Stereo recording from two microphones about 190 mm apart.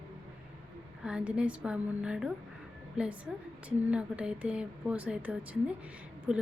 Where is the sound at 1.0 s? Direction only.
5° right (ahead or behind).